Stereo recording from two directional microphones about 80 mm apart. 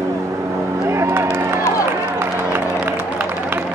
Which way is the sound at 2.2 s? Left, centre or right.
Right.